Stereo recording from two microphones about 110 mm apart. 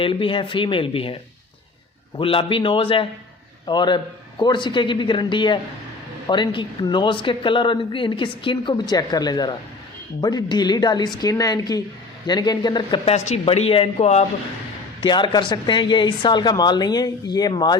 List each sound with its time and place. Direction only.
0.0 s speech: 50° left (ahead or behind)
3.7 s a woman's voice: 45° left (ahead or behind)
13.1 s speech: 80° left
15.0 s a woman's voice: 45° left (ahead or behind)